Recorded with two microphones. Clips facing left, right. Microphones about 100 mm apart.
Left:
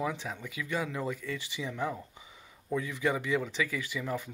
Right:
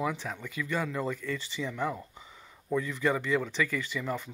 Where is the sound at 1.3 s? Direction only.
15° left (ahead or behind).